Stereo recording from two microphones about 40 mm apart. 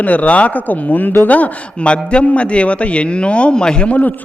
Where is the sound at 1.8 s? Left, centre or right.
Left.